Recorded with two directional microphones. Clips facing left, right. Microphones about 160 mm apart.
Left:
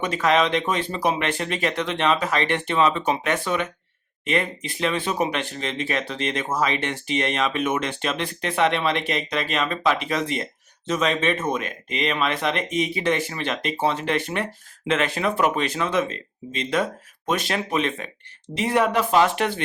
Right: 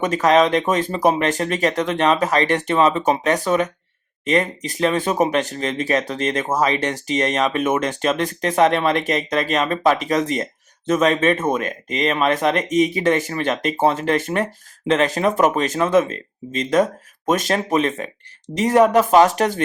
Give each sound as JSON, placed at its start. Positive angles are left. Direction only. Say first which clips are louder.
{"t": 0.0, "sound": "speech", "louder": "right 5 dB", "side_deg": -45}